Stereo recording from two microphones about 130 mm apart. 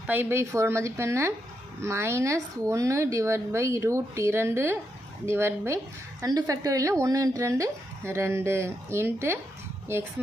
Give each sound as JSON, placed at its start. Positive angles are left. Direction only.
{"t": 0.1, "sound": "speech", "side_deg": -15}